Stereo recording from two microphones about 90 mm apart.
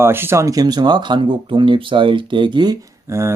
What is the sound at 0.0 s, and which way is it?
Speech, 25° right (ahead or behind).